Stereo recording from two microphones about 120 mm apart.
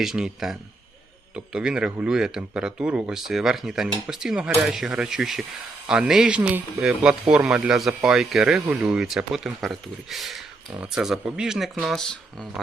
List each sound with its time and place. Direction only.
0.0 s speech: 5° right (ahead or behind)
1.5 s speech: 5° right (ahead or behind)